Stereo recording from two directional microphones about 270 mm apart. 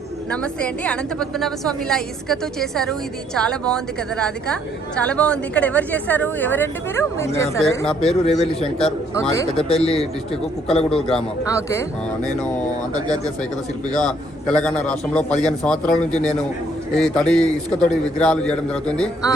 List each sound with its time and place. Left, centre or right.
0.3 s a woman's voice: centre
8.2 s a man's voice: left
8.6 s a woman's voice: centre
11.1 s speech: centre
13.9 s a woman's voice: centre